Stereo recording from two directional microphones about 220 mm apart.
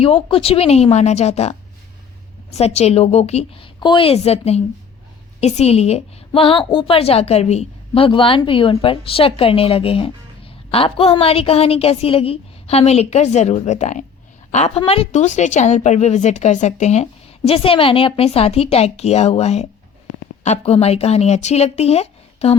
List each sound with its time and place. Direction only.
0.0 s a woman's voice: 25° left (ahead or behind)